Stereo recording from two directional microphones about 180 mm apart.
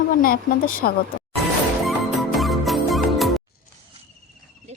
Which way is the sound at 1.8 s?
Centre (ahead or behind).